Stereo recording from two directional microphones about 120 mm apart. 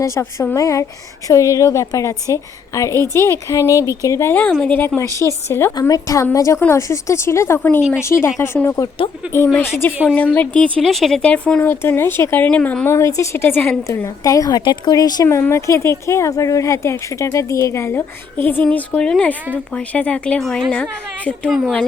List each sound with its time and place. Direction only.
0.0 s a woman's voice: 25° left (ahead or behind)
7.8 s a woman's voice: 5° right (ahead or behind)
8.0 s speech: 25° left (ahead or behind)
9.2 s speech: 10° right (ahead or behind)
9.8 s a woman's voice: 15° left (ahead or behind)